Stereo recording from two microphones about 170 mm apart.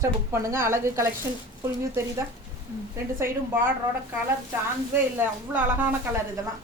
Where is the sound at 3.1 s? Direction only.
15° right (ahead or behind).